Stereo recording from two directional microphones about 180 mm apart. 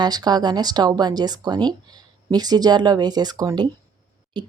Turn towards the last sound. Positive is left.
turn(degrees=-25)  # may be behind; listen again after turning